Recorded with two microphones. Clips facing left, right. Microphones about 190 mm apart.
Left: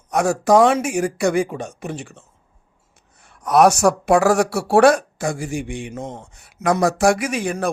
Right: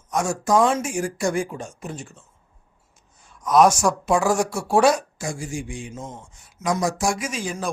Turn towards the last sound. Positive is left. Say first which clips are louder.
# left 6 dB
turn(degrees=60)  # may be behind; listen again after turning